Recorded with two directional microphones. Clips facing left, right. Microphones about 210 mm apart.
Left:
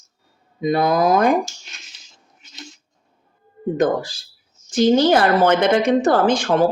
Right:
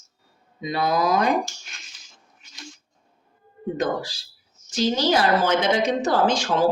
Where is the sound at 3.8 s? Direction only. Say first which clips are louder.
Left 7 dB; 50° left (ahead or behind).